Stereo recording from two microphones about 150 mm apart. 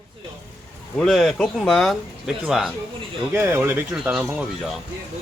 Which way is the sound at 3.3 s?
15° right (ahead or behind).